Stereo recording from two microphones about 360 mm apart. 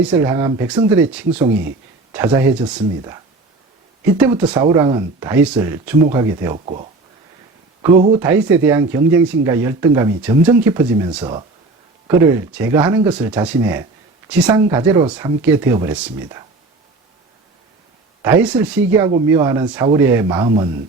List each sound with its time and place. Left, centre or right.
0.0 s speech: centre
4.2 s speech: centre
18.9 s speech: centre